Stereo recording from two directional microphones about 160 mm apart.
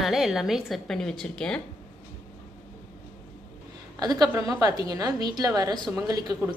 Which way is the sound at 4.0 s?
25° right (ahead or behind).